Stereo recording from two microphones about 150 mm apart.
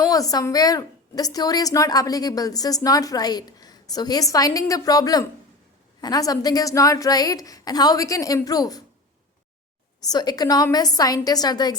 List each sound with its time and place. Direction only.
0.1 s a woman's voice: 25° left (ahead or behind)
10.1 s a woman's voice: 25° left (ahead or behind)